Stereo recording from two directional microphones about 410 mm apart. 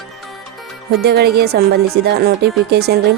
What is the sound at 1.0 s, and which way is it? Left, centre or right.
A woman's voice, right.